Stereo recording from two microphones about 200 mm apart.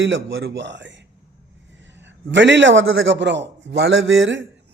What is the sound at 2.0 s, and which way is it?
A man's voice, 65° right (ahead or behind).